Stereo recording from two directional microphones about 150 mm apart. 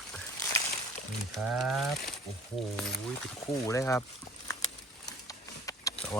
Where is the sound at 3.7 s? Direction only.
20° left (ahead or behind).